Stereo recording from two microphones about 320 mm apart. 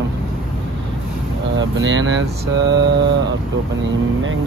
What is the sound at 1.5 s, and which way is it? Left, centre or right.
Speech, right.